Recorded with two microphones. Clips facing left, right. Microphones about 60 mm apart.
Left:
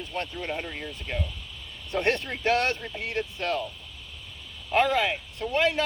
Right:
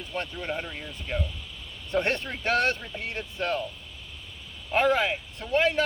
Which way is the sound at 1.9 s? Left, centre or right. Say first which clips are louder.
Even; right.